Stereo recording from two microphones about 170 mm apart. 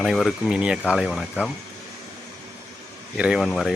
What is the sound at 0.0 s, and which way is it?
Speech, centre (ahead or behind).